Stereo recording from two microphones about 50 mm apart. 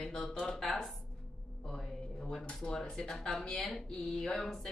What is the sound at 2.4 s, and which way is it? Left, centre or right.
Speech, left.